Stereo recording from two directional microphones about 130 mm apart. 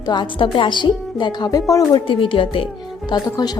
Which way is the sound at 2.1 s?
40° left (ahead or behind).